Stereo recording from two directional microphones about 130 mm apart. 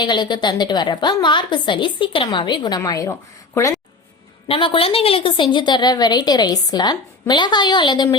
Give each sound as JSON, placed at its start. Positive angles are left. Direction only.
{"t": 0.0, "sound": "a woman's voice", "side_deg": 35}
{"t": 4.4, "sound": "a woman's voice", "side_deg": 45}